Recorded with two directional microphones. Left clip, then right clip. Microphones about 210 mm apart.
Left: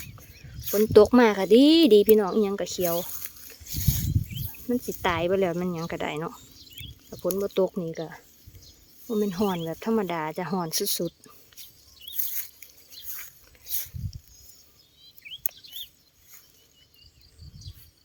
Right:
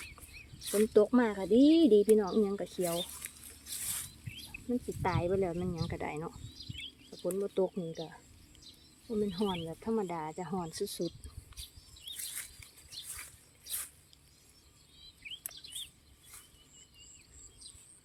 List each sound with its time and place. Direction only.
0.9 s speech: 45° left (ahead or behind)
4.7 s speech: 45° left (ahead or behind)
7.2 s speech: 45° left (ahead or behind)
12.1 s a sound: 25° left (ahead or behind)
15.2 s bird vocalization: 35° left (ahead or behind)